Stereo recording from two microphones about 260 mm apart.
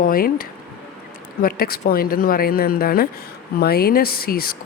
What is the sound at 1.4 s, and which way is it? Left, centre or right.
Speech, left.